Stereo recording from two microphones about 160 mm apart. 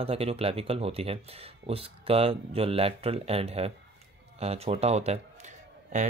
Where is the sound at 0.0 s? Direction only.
35° right (ahead or behind).